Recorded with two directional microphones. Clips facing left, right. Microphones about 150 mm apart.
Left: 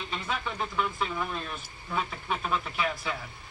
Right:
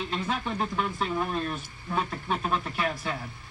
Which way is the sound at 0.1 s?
45° right (ahead or behind).